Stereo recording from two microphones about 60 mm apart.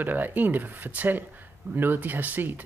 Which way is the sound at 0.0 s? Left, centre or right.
Right.